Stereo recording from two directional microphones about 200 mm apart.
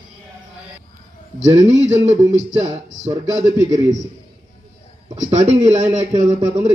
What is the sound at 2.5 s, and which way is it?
Speech, 30° right (ahead or behind).